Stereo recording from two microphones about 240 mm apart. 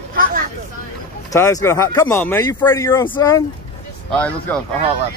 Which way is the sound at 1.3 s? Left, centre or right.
Centre.